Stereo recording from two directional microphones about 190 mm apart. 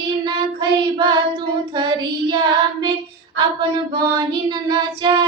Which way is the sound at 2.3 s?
20° right (ahead or behind).